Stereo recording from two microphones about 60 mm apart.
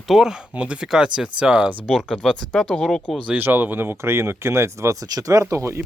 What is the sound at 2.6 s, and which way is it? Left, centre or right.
Speech, centre.